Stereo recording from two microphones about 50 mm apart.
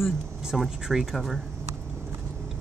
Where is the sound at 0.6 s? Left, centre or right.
Centre.